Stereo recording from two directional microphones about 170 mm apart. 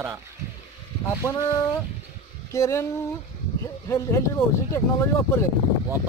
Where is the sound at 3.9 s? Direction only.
15° left (ahead or behind).